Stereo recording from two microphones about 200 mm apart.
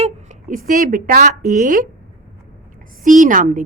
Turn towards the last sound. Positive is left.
turn(degrees=-40)  # may be behind; listen again after turning